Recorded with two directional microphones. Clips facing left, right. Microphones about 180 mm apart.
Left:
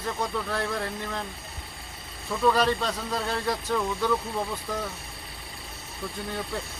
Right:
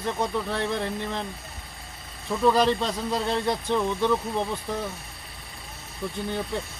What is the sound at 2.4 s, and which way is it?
Speech, 25° right (ahead or behind).